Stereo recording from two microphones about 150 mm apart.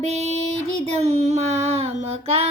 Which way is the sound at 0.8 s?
45° right (ahead or behind).